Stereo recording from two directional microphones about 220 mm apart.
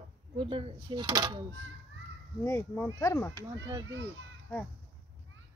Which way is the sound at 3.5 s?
15° right (ahead or behind).